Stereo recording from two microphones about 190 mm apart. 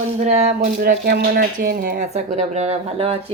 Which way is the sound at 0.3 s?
35° right (ahead or behind).